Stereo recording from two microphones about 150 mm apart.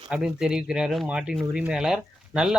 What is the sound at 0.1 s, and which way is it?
Speech, 5° right (ahead or behind).